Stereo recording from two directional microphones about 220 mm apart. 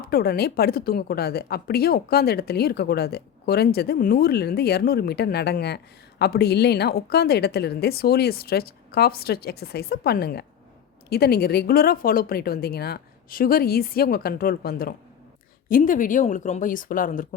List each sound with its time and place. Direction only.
0.1 s a woman's voice: 45° left (ahead or behind)